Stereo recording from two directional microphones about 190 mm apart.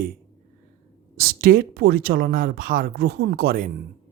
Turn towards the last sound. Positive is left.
turn(degrees=-50)  # may be behind; listen again after turning